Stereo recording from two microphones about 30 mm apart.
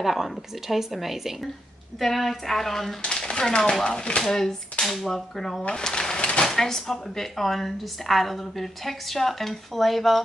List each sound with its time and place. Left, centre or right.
0.0 s a woman's voice: centre
2.0 s speech: centre
3.0 s speech: left
4.3 s speech: centre
5.8 s pigeon: left
6.5 s speech: centre